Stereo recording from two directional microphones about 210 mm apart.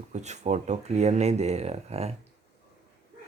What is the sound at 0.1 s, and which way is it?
Speech, 35° right (ahead or behind).